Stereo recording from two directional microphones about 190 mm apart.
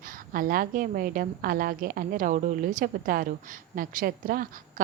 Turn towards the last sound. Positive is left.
turn(degrees=-50)  # may be behind; listen again after turning